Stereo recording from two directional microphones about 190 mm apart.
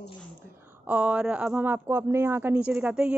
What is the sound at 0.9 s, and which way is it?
A woman's voice, 5° right (ahead or behind).